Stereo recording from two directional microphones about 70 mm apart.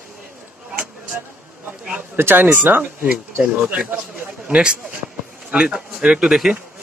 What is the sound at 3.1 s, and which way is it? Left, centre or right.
A man's voice, centre.